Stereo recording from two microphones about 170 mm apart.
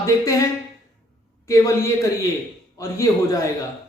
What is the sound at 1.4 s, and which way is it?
Speech, 20° left (ahead or behind).